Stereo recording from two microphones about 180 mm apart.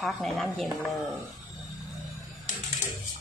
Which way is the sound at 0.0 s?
Centre (ahead or behind).